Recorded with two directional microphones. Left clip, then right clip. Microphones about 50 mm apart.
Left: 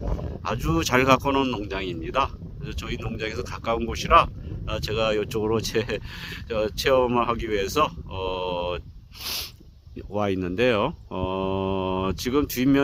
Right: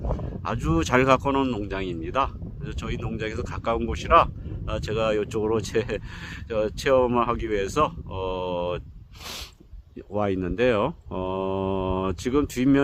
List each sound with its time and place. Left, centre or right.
0.4 s a man's voice: left
9.2 s a sound: left
10.1 s a man's voice: left